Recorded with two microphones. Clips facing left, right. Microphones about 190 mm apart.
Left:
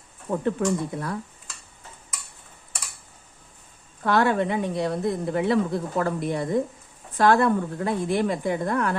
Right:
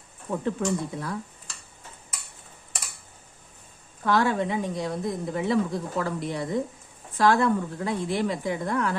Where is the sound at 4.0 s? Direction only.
60° left (ahead or behind).